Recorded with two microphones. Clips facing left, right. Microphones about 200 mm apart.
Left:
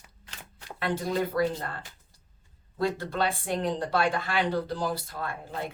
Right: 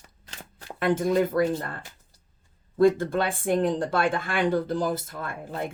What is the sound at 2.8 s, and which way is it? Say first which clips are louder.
Speech: right 8 dB; 50° right (ahead or behind).